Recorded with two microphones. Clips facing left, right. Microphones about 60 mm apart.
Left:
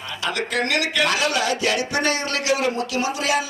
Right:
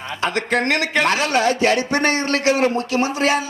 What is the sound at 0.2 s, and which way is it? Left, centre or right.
Speech, right.